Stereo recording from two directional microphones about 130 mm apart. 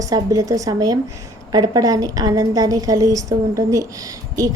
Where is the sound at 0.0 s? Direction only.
25° right (ahead or behind).